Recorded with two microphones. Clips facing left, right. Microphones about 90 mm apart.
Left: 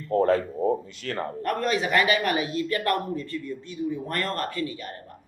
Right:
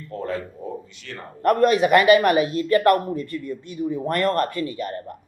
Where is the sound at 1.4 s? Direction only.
50° right (ahead or behind).